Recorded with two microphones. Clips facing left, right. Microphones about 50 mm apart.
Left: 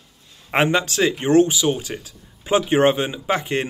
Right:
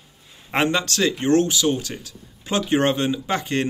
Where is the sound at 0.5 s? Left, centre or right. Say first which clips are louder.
Left 2 dB; centre.